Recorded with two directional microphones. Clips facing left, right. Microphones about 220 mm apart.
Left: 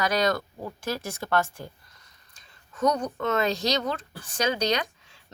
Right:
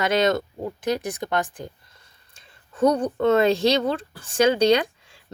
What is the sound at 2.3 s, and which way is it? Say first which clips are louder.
Speech: right 8 dB; 30° right (ahead or behind).